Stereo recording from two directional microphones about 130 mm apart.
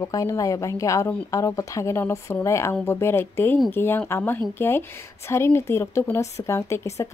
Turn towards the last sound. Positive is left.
turn(degrees=20)  # may be behind; listen again after turning